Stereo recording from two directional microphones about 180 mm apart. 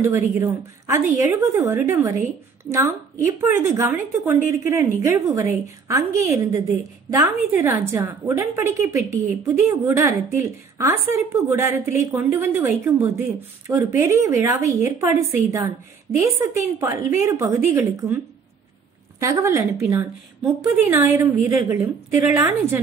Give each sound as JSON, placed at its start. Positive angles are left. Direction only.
{"t": 0.0, "sound": "a woman's voice", "side_deg": -15}